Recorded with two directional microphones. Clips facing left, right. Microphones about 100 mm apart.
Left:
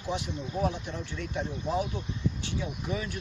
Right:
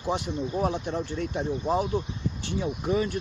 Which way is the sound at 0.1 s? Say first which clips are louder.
Right 5 dB; 45° right (ahead or behind).